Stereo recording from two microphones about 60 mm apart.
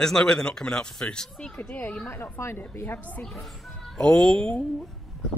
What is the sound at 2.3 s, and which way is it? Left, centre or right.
Speech, left.